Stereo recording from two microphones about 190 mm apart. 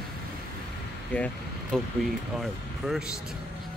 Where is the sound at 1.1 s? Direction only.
5° left (ahead or behind).